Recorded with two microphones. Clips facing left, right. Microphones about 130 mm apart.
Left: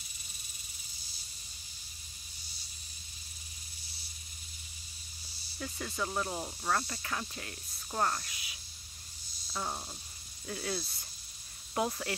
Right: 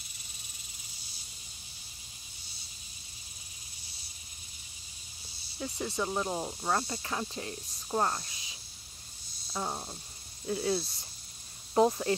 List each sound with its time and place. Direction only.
5.6 s speech: 20° right (ahead or behind)
9.5 s a sound: 15° right (ahead or behind)
10.4 s speech: 20° right (ahead or behind)